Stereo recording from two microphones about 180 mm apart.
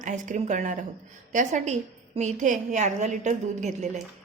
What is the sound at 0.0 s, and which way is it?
A woman's voice, 40° right (ahead or behind).